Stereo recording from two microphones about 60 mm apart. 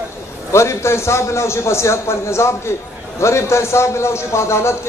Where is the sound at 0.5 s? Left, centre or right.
Left.